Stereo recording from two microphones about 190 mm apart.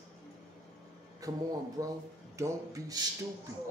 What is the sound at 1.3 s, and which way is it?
Speech, 20° right (ahead or behind).